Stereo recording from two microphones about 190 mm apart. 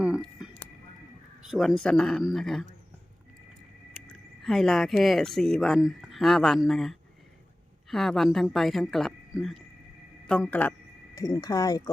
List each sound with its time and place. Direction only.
0.0 s a sound: 5° right (ahead or behind)
1.5 s speech: centre (ahead or behind)
4.0 s speech: centre (ahead or behind); by 11.8 s 20° left (ahead or behind)